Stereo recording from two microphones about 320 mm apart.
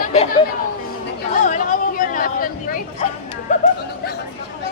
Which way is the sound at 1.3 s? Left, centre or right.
Left.